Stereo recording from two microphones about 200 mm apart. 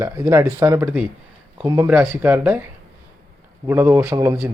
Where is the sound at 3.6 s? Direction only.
10° right (ahead or behind).